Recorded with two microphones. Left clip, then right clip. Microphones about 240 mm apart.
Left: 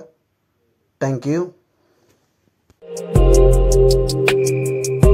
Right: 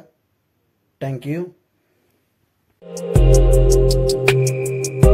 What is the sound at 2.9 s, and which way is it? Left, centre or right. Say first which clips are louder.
Music: left 2 dB; centre.